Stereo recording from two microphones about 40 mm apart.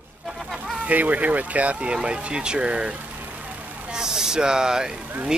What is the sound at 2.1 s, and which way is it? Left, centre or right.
Speech, right.